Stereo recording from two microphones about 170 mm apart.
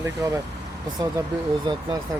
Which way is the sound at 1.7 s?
25° right (ahead or behind).